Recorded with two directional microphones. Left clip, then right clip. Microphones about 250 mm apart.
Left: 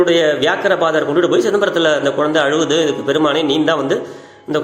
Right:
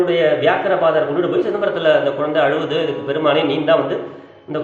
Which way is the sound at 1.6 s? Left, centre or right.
Left.